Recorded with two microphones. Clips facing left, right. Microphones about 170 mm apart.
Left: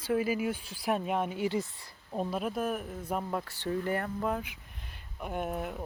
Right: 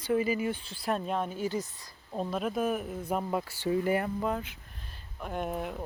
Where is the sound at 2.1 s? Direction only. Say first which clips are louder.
Right 1 dB; 5° left (ahead or behind).